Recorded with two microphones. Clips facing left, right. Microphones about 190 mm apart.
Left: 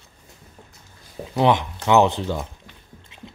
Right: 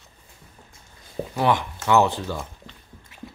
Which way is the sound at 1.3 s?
20° left (ahead or behind).